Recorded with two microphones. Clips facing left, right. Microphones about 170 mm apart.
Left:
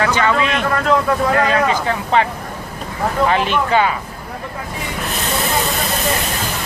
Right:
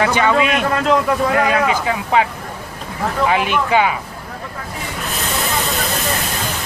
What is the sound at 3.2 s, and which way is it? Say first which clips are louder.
Speech: right 1 dB; 10° right (ahead or behind).